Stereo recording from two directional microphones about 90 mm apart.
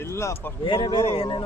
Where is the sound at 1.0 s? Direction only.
90° left.